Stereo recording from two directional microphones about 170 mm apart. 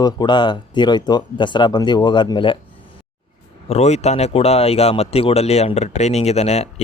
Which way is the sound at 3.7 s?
40° left (ahead or behind).